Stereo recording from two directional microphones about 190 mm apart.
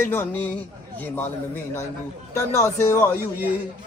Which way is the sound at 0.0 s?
10° left (ahead or behind).